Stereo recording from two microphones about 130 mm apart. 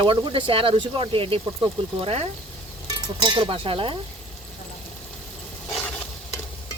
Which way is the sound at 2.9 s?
35° right (ahead or behind).